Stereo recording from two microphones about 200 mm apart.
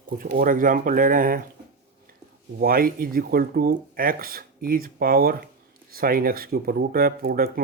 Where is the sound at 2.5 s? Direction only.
45° right (ahead or behind).